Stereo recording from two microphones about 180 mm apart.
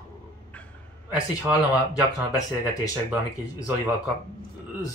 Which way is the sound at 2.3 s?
20° left (ahead or behind).